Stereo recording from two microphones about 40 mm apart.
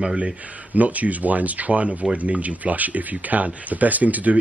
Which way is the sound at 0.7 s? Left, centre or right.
Right.